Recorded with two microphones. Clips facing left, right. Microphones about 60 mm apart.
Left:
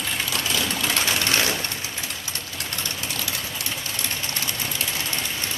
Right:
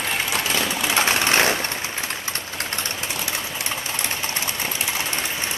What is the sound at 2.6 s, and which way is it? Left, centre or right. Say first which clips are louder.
Vehicle: right 4 dB; right.